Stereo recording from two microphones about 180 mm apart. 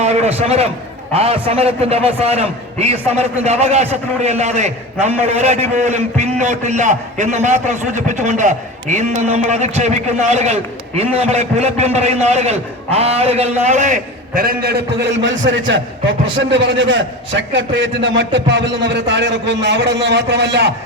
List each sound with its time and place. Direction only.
0.0 s a man's voice: 35° right (ahead or behind); by 15.3 s 75° right (ahead or behind)
15.6 s a man's voice: 90° right; by 20.7 s 70° right (ahead or behind)